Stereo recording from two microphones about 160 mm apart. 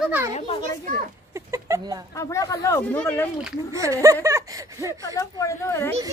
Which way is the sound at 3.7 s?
20° right (ahead or behind).